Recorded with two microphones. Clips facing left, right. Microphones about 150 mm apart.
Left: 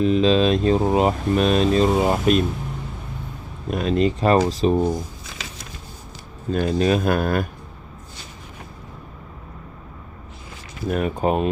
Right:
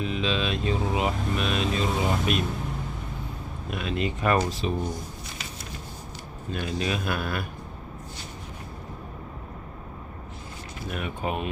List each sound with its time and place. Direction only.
0.0 s speech: 40° left (ahead or behind)
3.7 s speech: 40° left (ahead or behind)
5.2 s a sound: 90° left
6.5 s speech: 40° left (ahead or behind)
10.8 s speech: 40° left (ahead or behind)